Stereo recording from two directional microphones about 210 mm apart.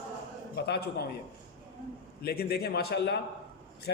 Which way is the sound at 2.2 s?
45° left (ahead or behind).